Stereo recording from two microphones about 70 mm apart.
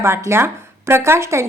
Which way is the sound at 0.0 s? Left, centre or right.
Right.